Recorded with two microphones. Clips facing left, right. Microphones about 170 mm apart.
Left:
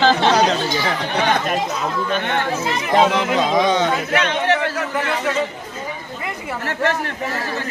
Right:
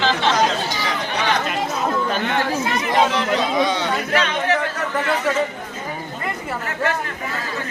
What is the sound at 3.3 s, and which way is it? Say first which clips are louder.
Speech: left 5 dB; 45° left (ahead or behind).